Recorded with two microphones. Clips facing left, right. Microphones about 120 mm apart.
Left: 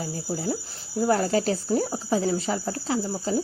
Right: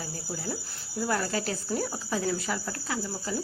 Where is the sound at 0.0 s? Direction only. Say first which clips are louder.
Left 7 dB; 40° left (ahead or behind).